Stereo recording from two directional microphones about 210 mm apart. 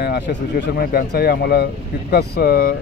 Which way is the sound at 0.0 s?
50° left (ahead or behind).